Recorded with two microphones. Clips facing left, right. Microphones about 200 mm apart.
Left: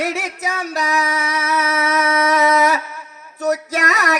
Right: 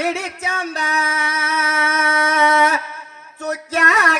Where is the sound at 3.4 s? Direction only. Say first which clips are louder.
Left 2 dB; 40° left (ahead or behind).